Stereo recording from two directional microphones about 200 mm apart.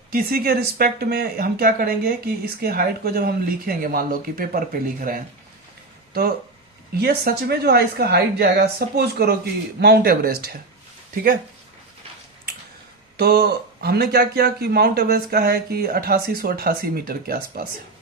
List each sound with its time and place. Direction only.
0.1 s speech: 45° right (ahead or behind)
6.9 s speech: 50° right (ahead or behind)
13.1 s speech: 55° right (ahead or behind)